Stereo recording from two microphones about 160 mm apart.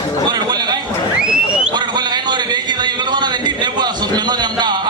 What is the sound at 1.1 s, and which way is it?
Speech, 5° right (ahead or behind).